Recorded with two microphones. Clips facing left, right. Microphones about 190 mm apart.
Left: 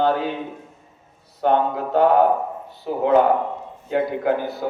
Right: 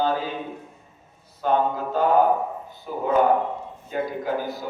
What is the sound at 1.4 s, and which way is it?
A man's voice, 65° left (ahead or behind).